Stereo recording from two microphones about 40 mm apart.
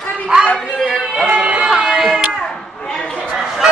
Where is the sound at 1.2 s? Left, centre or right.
Right.